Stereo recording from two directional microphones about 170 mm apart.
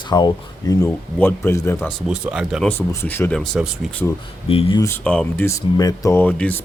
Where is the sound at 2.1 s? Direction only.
5° right (ahead or behind).